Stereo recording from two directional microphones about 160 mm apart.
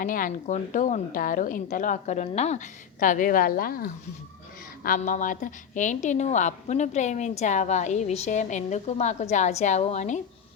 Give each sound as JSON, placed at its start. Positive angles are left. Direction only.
{"t": 0.0, "sound": "a woman's voice", "side_deg": 60}